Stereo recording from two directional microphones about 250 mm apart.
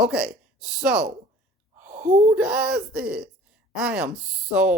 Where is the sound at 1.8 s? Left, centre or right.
Right.